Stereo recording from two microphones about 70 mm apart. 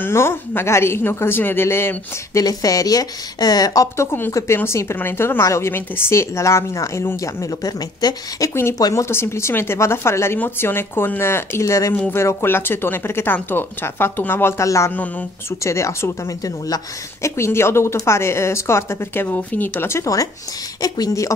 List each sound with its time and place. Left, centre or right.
0.0 s speech: left
2.3 s speech: left
3.9 s speech: left
7.6 s speech: left
9.1 s speech: left
11.6 s speech: left
12.1 s speech: left
14.6 s speech: left
20.8 s speech: left